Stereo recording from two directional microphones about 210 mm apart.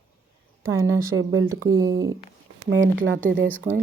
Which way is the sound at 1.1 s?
75° right (ahead or behind).